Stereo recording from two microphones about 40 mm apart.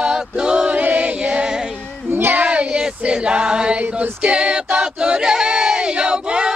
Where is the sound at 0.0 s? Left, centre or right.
Right.